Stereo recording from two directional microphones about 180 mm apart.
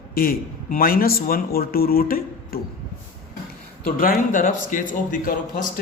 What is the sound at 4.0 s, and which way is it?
A man's voice, 50° left (ahead or behind).